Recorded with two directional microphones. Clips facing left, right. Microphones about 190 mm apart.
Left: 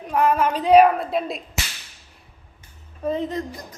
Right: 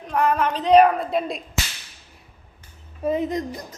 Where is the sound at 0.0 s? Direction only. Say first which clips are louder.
Left 2 dB; 5° left (ahead or behind).